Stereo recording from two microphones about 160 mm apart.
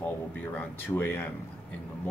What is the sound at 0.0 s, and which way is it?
Speech, 10° left (ahead or behind).